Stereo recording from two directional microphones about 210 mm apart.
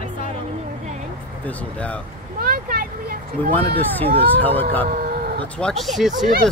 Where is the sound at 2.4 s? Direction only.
45° right (ahead or behind).